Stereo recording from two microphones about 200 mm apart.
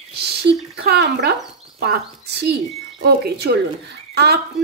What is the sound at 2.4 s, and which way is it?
Speech, 55° right (ahead or behind).